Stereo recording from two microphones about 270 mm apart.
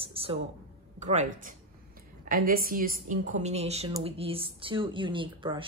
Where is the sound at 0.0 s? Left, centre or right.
Right.